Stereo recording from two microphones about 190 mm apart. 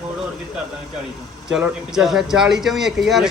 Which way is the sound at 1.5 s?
5° right (ahead or behind).